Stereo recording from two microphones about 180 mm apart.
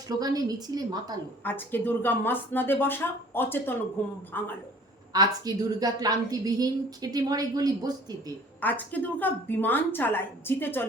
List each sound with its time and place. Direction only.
0.2 s a woman's voice: 20° right (ahead or behind)
1.5 s a woman's voice: 10° left (ahead or behind)
5.1 s a woman's voice: 20° right (ahead or behind)
8.6 s a woman's voice: 10° left (ahead or behind)